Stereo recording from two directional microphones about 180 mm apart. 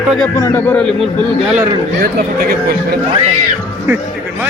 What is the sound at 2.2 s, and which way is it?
Speech, 60° right (ahead or behind).